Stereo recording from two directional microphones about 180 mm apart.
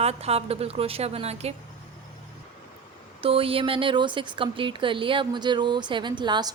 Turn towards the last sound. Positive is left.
turn(degrees=-25)  # may be behind; listen again after turning